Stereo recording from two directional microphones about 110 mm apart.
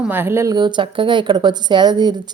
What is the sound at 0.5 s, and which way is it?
A woman's voice, 45° right (ahead or behind).